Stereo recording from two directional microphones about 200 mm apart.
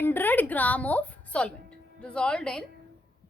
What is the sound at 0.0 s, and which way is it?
Speech, 10° left (ahead or behind).